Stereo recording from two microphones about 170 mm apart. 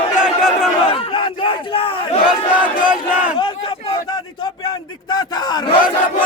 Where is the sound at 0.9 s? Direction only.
30° left (ahead or behind).